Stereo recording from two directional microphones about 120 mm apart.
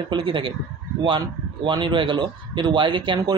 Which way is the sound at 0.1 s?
45° right (ahead or behind).